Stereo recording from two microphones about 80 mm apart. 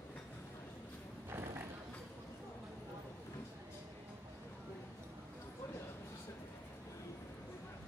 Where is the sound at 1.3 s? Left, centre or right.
Right.